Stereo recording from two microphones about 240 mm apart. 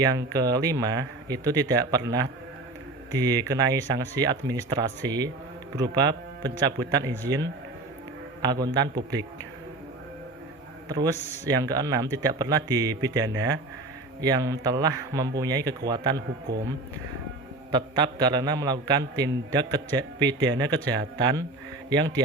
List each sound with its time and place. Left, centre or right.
0.0 s a man's voice: centre
3.1 s a man's voice: centre
8.4 s a man's voice: centre
10.8 s a man's voice: centre
17.7 s a man's voice: centre